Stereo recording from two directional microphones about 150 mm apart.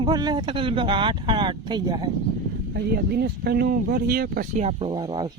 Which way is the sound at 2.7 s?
90° right.